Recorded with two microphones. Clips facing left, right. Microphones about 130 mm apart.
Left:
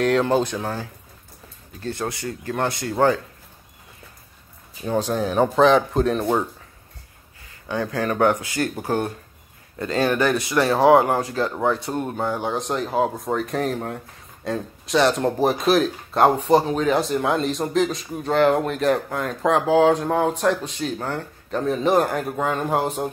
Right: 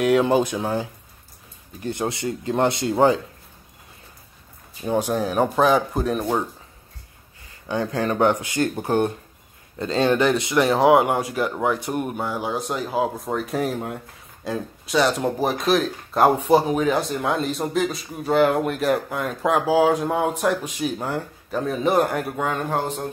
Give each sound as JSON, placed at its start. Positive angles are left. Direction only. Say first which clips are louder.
{"t": 0.0, "sound": "speech", "louder": "right 1 dB", "side_deg": -10}
{"t": 4.8, "sound": "speech", "louder": "even", "side_deg": -10}
{"t": 7.6, "sound": "speech", "louder": "right 1 dB", "side_deg": -25}
{"t": 12.3, "sound": "speech", "louder": "left 2 dB", "side_deg": -5}